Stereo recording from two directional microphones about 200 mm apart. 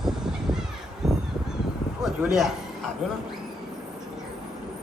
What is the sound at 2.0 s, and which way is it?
Speech, centre (ahead or behind).